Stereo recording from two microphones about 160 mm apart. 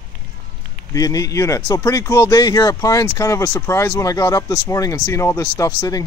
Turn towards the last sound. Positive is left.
turn(degrees=20)  # may be behind; listen again after turning